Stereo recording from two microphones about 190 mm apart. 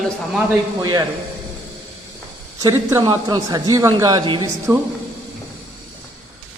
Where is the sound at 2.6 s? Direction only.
15° right (ahead or behind).